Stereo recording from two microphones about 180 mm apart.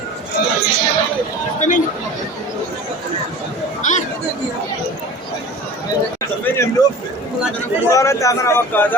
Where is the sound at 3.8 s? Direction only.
45° left (ahead or behind).